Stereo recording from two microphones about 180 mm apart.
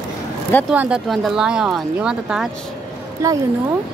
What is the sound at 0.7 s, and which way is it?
Speech, 5° right (ahead or behind).